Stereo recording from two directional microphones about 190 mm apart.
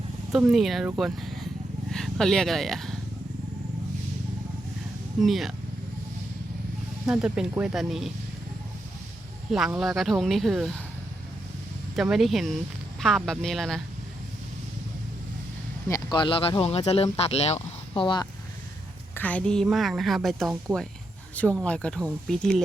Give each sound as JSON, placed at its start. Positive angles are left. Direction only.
{"t": 0.3, "sound": "speech", "side_deg": 0}
{"t": 5.2, "sound": "speech", "side_deg": 0}
{"t": 7.0, "sound": "speech", "side_deg": -5}
{"t": 9.5, "sound": "speech", "side_deg": 0}
{"t": 11.9, "sound": "speech", "side_deg": 0}
{"t": 16.1, "sound": "speech", "side_deg": 25}
{"t": 19.1, "sound": "a woman's voice", "side_deg": 10}